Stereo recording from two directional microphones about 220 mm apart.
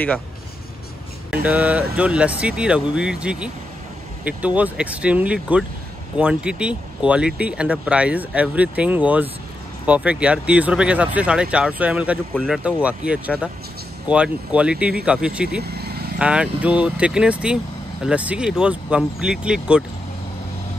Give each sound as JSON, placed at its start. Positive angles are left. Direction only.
{"t": 1.3, "sound": "speech", "side_deg": -5}
{"t": 15.6, "sound": "vehicle", "side_deg": -45}
{"t": 16.2, "sound": "speech", "side_deg": -5}